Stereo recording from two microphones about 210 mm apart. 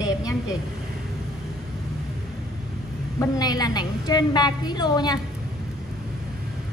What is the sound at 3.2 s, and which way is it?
A woman's voice, 15° left (ahead or behind).